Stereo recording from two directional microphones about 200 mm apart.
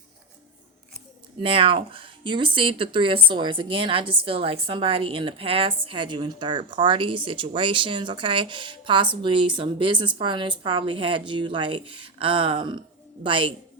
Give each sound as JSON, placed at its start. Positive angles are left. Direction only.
{"t": 1.4, "sound": "speech", "side_deg": -25}